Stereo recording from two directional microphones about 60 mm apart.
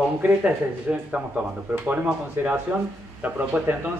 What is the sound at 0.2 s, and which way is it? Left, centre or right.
Speech, right.